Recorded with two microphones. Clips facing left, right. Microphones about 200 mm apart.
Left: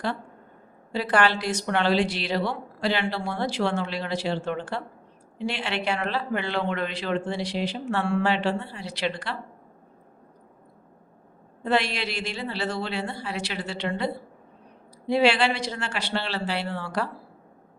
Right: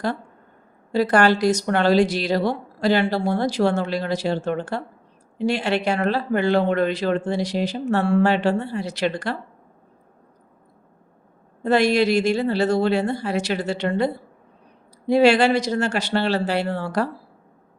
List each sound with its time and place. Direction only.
0.9 s speech: 45° right (ahead or behind)
11.6 s speech: 45° right (ahead or behind)